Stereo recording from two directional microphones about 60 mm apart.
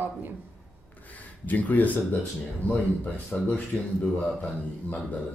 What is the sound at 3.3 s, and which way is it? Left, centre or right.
Speech, left.